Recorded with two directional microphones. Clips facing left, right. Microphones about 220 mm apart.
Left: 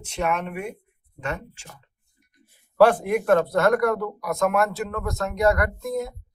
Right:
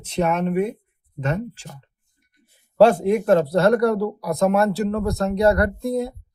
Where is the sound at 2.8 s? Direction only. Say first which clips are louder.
Right 3 dB; 25° right (ahead or behind).